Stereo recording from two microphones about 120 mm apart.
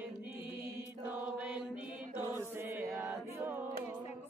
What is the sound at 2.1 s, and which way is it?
Chant, 20° right (ahead or behind).